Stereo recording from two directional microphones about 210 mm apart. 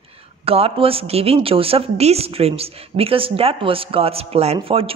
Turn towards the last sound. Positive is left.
turn(degrees=-25)  # may be behind; listen again after turning